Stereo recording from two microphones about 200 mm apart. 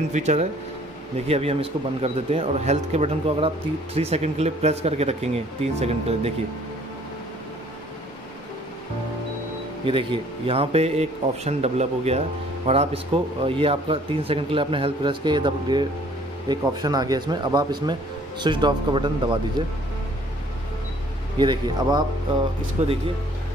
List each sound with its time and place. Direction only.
0.1 s speech: 35° right (ahead or behind)
9.8 s speech: 25° right (ahead or behind)
21.4 s speech: 20° right (ahead or behind)
22.8 s speech: 30° right (ahead or behind)